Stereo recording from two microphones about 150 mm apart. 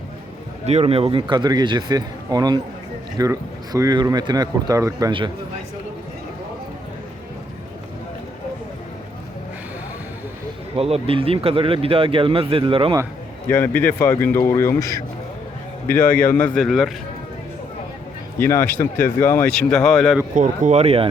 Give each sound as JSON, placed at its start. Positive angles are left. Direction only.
{"t": 0.6, "sound": "a man's voice", "side_deg": -45}
{"t": 10.8, "sound": "speech", "side_deg": -40}
{"t": 13.5, "sound": "speech", "side_deg": 10}
{"t": 15.9, "sound": "speech", "side_deg": 10}
{"t": 18.3, "sound": "speech", "side_deg": 15}
{"t": 20.3, "sound": "speech", "side_deg": -60}